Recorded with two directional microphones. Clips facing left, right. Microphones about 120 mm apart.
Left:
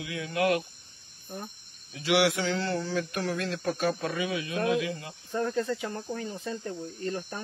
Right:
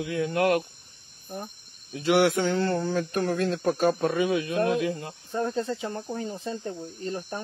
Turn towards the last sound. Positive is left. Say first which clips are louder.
# right 1 dB
turn(degrees=-30)  # may be behind; listen again after turning